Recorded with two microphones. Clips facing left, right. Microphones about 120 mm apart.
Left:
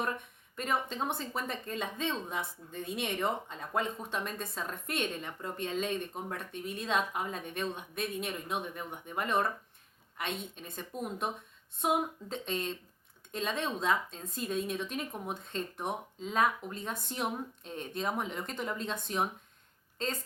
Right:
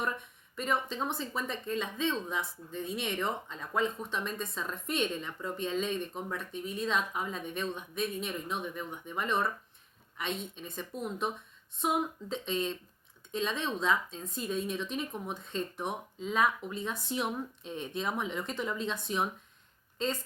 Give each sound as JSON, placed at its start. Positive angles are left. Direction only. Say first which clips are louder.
{"t": 0.5, "sound": "speech", "louder": "right 1 dB", "side_deg": 50}